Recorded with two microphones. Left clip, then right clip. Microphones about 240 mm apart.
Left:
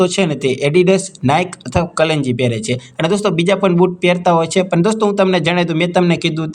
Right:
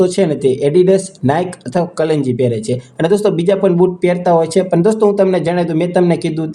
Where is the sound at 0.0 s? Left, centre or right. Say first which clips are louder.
Right 2 dB; left.